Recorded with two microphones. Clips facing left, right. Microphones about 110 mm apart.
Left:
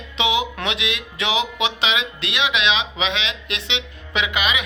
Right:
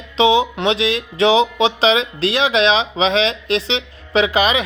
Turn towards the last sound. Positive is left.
turn(degrees=-35)  # may be behind; listen again after turning